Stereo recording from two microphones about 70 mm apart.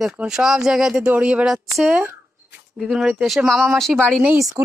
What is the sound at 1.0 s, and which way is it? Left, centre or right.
Speech, centre.